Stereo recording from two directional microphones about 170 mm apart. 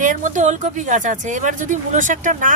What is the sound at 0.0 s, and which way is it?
Speech, 50° right (ahead or behind).